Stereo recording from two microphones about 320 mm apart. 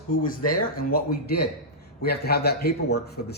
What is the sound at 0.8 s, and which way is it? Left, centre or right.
Speech, left.